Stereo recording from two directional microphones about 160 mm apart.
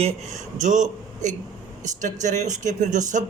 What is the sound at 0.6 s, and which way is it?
A man's voice, 50° right (ahead or behind).